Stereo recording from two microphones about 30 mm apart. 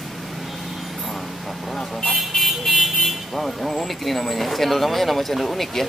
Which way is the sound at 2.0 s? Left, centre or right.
Centre.